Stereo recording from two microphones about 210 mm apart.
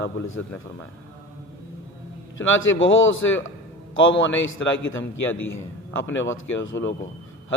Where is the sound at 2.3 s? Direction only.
65° left (ahead or behind).